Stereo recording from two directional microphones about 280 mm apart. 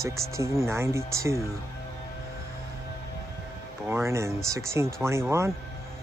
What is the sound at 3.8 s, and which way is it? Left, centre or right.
Speech, centre.